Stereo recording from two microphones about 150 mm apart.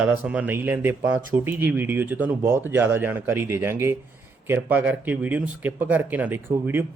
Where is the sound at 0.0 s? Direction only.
10° right (ahead or behind).